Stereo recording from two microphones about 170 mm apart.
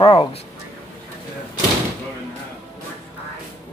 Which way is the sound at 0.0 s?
35° left (ahead or behind).